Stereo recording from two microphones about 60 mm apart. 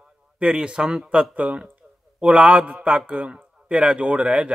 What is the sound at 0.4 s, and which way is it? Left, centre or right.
Speech, centre.